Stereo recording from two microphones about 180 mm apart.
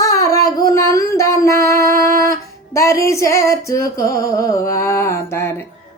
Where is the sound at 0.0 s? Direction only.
20° left (ahead or behind).